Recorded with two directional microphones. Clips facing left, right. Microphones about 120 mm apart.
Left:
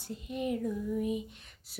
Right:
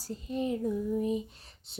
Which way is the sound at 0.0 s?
35° right (ahead or behind).